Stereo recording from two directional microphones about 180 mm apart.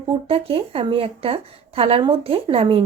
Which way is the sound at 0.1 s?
30° right (ahead or behind).